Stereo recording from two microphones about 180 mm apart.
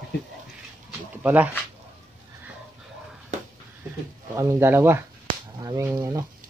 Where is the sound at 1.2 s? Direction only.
10° right (ahead or behind).